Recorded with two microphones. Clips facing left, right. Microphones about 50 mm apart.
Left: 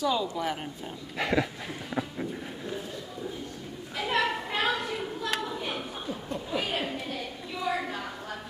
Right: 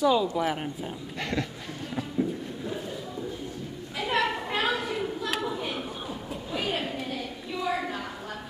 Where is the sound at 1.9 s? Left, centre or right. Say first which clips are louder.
Right 4 dB; centre.